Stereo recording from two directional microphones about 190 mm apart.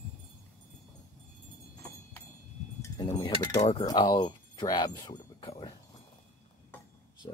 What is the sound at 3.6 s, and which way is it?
Speech, 30° left (ahead or behind).